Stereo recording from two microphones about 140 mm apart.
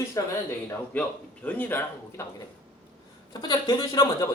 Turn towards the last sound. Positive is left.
turn(degrees=25)  # may be behind; listen again after turning